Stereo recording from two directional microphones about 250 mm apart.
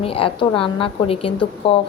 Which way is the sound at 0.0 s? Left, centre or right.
Left.